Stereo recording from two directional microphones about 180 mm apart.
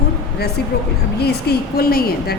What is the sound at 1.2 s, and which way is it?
A woman's voice, 60° left (ahead or behind).